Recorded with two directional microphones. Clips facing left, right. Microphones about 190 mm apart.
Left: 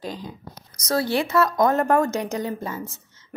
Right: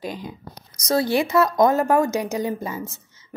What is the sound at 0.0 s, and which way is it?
A woman's voice, 15° right (ahead or behind).